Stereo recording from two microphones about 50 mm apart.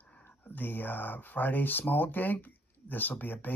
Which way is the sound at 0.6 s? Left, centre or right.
Left.